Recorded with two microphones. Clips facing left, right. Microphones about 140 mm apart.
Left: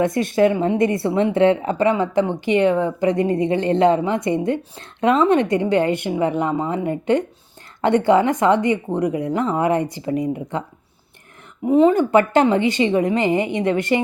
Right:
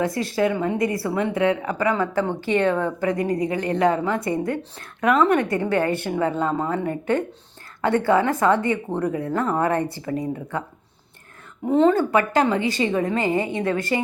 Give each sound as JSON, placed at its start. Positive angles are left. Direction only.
{"t": 0.0, "sound": "a woman's voice", "side_deg": 20}
{"t": 11.6, "sound": "a woman's voice", "side_deg": 10}
{"t": 12.1, "sound": "a woman's voice", "side_deg": 25}